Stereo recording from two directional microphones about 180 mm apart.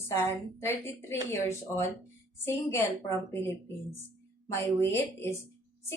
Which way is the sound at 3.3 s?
15° left (ahead or behind).